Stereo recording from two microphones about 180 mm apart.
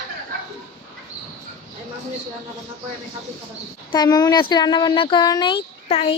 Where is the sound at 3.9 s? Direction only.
20° left (ahead or behind).